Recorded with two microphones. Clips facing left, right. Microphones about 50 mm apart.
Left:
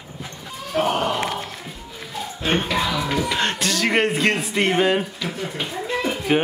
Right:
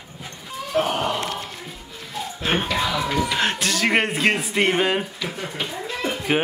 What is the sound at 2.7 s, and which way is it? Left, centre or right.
Speech, centre.